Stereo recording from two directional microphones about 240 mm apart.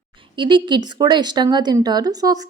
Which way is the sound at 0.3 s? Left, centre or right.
Centre.